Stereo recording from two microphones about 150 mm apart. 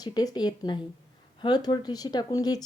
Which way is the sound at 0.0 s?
25° left (ahead or behind).